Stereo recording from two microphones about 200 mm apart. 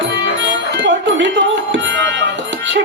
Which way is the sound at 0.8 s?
65° right (ahead or behind).